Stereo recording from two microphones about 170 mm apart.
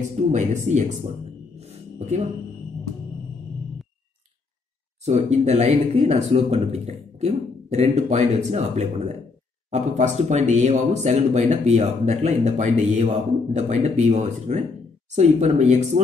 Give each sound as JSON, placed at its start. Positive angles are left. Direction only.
{"t": 0.3, "sound": "speech", "side_deg": -45}
{"t": 2.0, "sound": "speech", "side_deg": -40}
{"t": 5.0, "sound": "speech", "side_deg": -40}